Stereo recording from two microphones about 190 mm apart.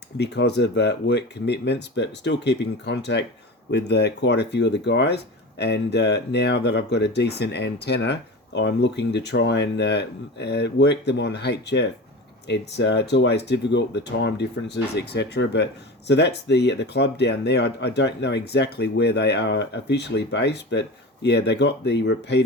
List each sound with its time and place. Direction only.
0.2 s speech: 65° left (ahead or behind)